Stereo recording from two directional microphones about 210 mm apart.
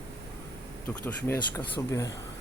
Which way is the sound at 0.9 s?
5° left (ahead or behind).